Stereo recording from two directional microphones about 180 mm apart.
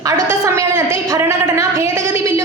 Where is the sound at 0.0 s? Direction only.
15° right (ahead or behind).